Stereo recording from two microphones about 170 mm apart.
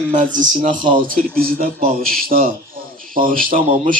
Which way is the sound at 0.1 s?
50° right (ahead or behind).